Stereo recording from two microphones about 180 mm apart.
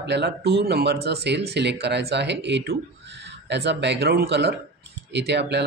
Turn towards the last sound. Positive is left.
turn(degrees=-70)  # may be behind; listen again after turning